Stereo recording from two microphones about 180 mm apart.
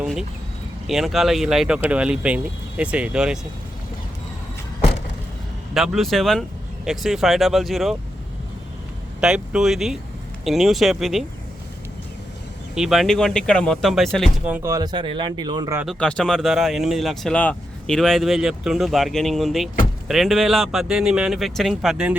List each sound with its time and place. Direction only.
0.0 s a sound: 5° right (ahead or behind)
0.9 s speech: centre (ahead or behind)
5.7 s speech: centre (ahead or behind)
9.2 s speech: 5° right (ahead or behind)
12.7 s speech: centre (ahead or behind)
14.5 s speech: 15° right (ahead or behind)
16.0 s speech: 5° left (ahead or behind)